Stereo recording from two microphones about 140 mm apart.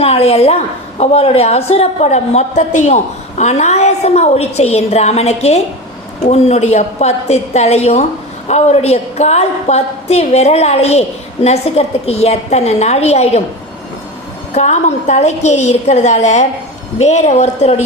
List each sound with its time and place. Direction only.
0.0 s a woman's voice: 45° left (ahead or behind)
14.5 s a woman's voice: 55° left (ahead or behind)